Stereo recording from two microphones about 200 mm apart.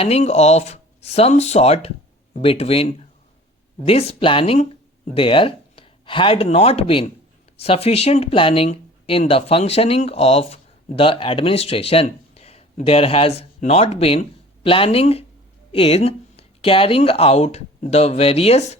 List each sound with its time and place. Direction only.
0.0 s speech: 30° left (ahead or behind)